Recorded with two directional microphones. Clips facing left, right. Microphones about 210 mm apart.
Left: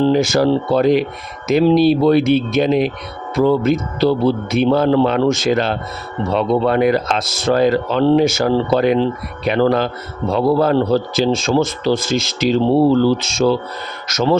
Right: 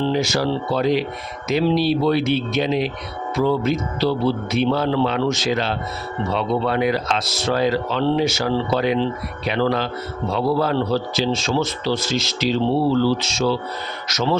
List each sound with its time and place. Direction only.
0.0 s speech: 50° left (ahead or behind)